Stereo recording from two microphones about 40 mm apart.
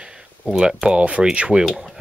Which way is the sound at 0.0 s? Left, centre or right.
Right.